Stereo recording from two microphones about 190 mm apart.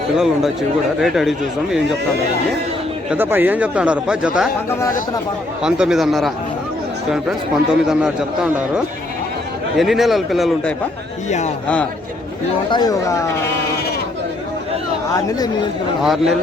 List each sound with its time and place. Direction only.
1.0 s a man's voice: centre (ahead or behind)
3.1 s speech: 10° right (ahead or behind)
5.6 s a man's voice: 5° right (ahead or behind)
11.3 s a man's voice: 40° left (ahead or behind)
12.7 s speech: 20° left (ahead or behind)
16.0 s a man's voice: centre (ahead or behind)